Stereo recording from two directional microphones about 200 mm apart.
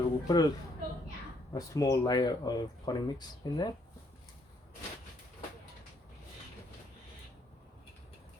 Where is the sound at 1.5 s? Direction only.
15° left (ahead or behind).